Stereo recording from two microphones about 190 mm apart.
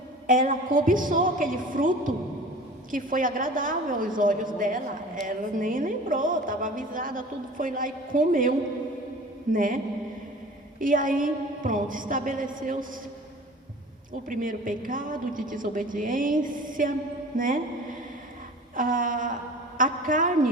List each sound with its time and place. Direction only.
0.3 s a woman's voice: 45° right (ahead or behind)
14.1 s a woman's voice: 45° right (ahead or behind)
18.8 s a woman's voice: 45° right (ahead or behind)